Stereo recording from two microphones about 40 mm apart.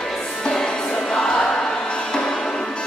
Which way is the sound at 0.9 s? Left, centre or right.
Left.